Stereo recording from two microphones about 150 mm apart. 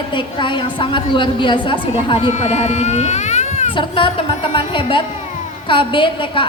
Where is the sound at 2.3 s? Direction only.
50° left (ahead or behind).